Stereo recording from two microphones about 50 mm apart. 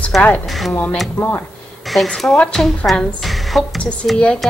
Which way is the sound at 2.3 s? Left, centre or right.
Left.